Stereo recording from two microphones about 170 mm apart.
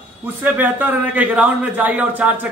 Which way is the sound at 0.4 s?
10° right (ahead or behind).